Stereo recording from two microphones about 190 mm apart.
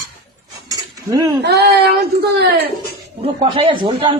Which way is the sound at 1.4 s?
60° right (ahead or behind).